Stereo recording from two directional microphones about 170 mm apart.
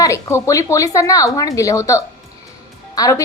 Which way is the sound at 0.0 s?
15° left (ahead or behind).